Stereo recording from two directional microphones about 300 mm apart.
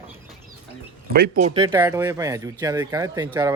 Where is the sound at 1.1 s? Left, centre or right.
Right.